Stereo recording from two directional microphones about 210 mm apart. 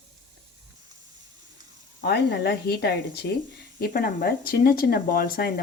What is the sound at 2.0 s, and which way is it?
A woman's voice, 55° left (ahead or behind).